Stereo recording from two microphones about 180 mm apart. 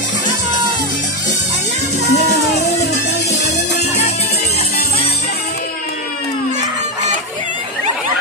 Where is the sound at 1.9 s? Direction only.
65° left (ahead or behind).